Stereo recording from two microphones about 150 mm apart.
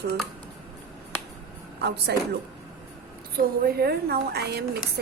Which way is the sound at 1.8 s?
90° right.